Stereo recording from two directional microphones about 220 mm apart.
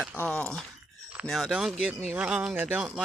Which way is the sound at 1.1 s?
Centre (ahead or behind).